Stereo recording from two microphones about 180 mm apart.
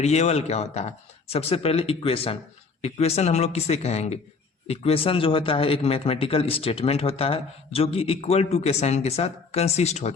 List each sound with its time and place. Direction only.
0.0 s a man's voice: 35° left (ahead or behind)